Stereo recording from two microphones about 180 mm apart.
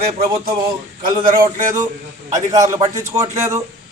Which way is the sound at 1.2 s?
50° right (ahead or behind).